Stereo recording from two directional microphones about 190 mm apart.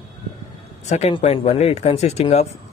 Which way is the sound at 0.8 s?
35° left (ahead or behind).